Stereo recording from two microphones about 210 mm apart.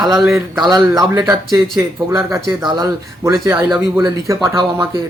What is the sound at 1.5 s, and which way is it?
Speech, centre (ahead or behind).